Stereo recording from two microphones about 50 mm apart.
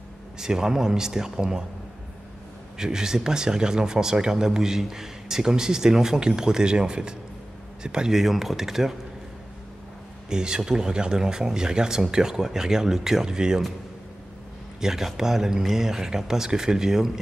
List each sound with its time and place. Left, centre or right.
0.4 s speech: centre
2.8 s speech: centre
10.3 s speech: centre
14.8 s speech: centre